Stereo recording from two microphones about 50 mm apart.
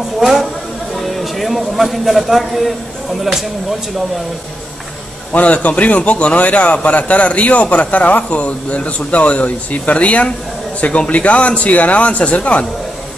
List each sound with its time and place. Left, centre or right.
0.2 s speech: centre
5.3 s a man's voice: left